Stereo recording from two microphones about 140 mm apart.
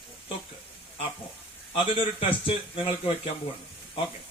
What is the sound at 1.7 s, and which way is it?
A man's voice, 40° left (ahead or behind).